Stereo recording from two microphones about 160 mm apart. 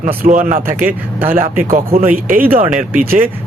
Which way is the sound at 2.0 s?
60° right (ahead or behind).